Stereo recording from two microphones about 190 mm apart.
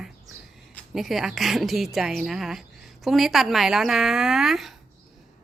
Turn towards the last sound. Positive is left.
turn(degrees=0)  # may be behind; listen again after turning